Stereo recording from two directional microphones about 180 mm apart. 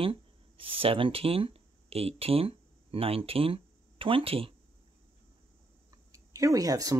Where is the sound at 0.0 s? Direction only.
30° right (ahead or behind).